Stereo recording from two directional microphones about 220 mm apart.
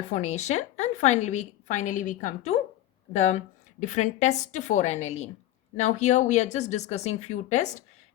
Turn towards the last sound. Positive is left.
turn(degrees=35)  # may be behind; listen again after turning